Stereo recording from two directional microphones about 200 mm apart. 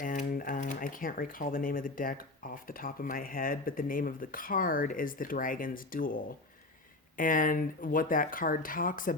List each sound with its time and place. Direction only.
0.0 s speech: 40° left (ahead or behind)